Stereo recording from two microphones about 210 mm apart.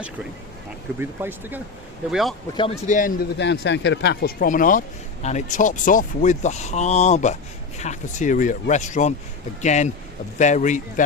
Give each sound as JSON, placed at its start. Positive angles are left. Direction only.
{"t": 0.9, "sound": "speech", "side_deg": -10}
{"t": 2.6, "sound": "speech", "side_deg": 30}